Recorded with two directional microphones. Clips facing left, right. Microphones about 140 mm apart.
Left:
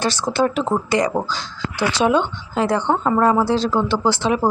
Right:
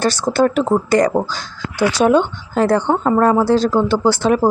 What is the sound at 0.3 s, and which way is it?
A woman's voice, 45° right (ahead or behind).